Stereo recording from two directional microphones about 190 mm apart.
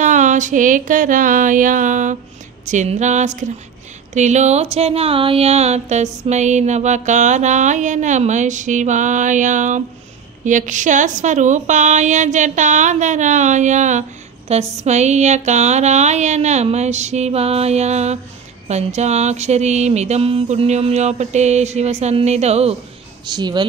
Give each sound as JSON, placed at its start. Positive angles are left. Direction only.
{"t": 0.0, "sound": "a sound", "side_deg": -40}
{"t": 2.6, "sound": "speech", "side_deg": -40}
{"t": 23.2, "sound": "speech", "side_deg": -25}